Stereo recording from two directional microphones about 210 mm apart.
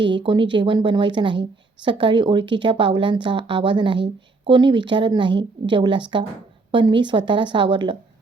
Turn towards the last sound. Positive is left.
turn(degrees=-25)  # may be behind; listen again after turning